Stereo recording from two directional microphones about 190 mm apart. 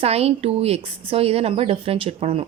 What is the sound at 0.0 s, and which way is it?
Speech, 30° right (ahead or behind).